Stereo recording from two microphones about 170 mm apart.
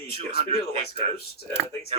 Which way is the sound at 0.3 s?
35° right (ahead or behind).